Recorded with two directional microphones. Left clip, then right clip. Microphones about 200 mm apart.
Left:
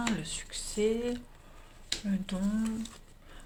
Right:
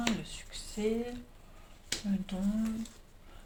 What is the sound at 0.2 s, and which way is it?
Whispering, 50° left (ahead or behind).